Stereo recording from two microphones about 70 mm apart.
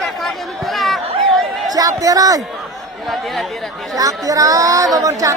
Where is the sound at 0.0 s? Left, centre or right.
Centre.